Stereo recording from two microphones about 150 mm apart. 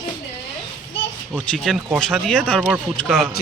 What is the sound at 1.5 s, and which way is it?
Speech, centre (ahead or behind).